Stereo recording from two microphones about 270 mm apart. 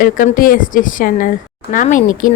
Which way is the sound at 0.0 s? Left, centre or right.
Left.